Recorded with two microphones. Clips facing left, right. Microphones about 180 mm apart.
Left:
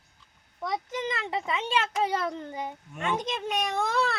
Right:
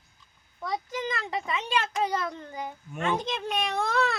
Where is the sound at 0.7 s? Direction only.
20° left (ahead or behind).